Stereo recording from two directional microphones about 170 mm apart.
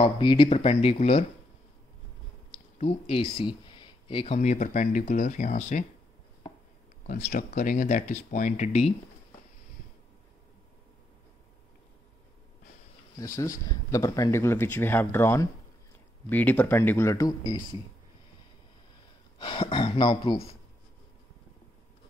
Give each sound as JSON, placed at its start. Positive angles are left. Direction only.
{"t": 0.0, "sound": "speech", "side_deg": 30}
{"t": 2.5, "sound": "speech", "side_deg": 35}
{"t": 4.4, "sound": "speech", "side_deg": 45}
{"t": 7.1, "sound": "speech", "side_deg": 50}
{"t": 13.4, "sound": "speech", "side_deg": 20}
{"t": 19.3, "sound": "speech", "side_deg": 30}